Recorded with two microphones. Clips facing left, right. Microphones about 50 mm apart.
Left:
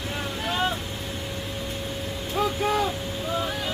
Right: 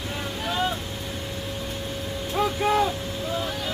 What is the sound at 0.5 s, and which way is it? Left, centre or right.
Vehicle, centre.